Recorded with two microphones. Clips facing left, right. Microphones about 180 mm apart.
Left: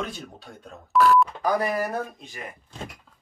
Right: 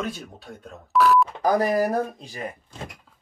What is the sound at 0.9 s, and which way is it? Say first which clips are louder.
Beep: even; centre (ahead or behind).